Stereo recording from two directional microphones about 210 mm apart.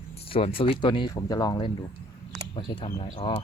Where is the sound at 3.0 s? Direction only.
25° left (ahead or behind).